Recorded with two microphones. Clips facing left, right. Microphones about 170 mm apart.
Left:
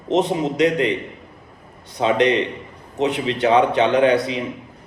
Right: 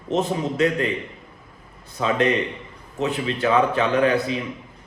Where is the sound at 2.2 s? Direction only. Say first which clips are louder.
Left 3 dB; 30° left (ahead or behind).